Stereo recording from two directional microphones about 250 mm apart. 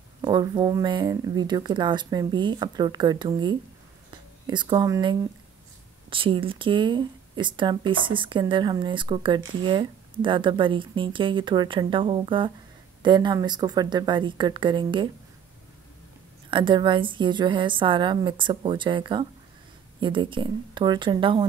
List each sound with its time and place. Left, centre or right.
0.2 s speech: centre
16.4 s speech: centre